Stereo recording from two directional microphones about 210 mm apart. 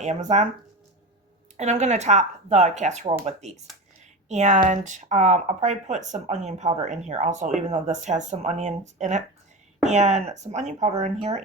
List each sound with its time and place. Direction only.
0.0 s speech: 35° right (ahead or behind)
1.5 s speech: 35° right (ahead or behind)